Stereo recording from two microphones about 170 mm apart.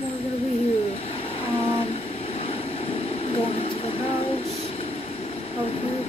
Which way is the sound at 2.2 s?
35° left (ahead or behind).